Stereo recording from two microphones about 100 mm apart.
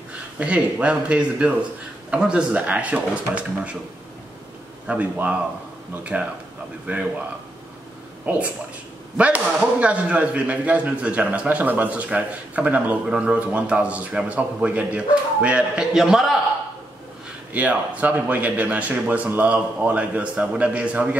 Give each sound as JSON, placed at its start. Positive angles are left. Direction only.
{"t": 0.4, "sound": "speech", "side_deg": -10}
{"t": 4.8, "sound": "speech", "side_deg": -15}
{"t": 8.3, "sound": "speech", "side_deg": -15}
{"t": 17.5, "sound": "speech", "side_deg": -15}